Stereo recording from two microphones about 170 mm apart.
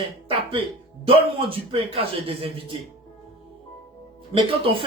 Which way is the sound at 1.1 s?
35° right (ahead or behind).